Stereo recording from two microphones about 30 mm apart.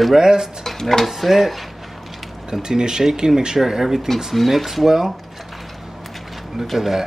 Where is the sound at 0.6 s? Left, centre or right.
Centre.